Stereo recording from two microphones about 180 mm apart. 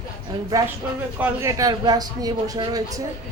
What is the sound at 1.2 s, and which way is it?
Speech, 15° right (ahead or behind).